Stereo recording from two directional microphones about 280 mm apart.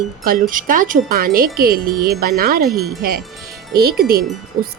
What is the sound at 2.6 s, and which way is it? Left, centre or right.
Speech, centre.